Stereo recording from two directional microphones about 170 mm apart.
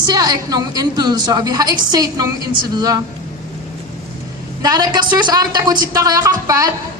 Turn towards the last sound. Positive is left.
turn(degrees=-20)  # may be behind; listen again after turning